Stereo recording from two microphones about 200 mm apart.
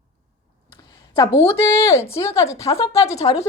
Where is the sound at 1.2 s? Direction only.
30° left (ahead or behind).